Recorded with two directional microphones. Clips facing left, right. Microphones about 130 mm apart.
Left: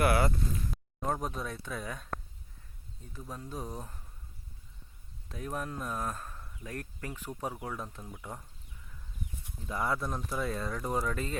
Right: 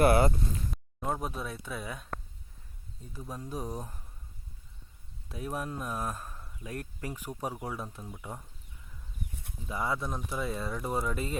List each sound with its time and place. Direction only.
0.0 s speech: 25° right (ahead or behind)
1.0 s speech: 5° right (ahead or behind)
3.1 s speech: 10° right (ahead or behind)
5.3 s speech: 10° right (ahead or behind)
9.6 s speech: 5° right (ahead or behind)